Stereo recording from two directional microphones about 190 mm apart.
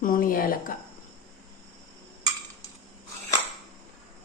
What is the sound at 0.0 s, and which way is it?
Speech, 45° left (ahead or behind).